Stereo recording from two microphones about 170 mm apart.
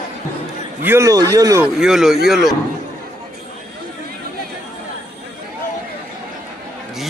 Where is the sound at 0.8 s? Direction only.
15° right (ahead or behind).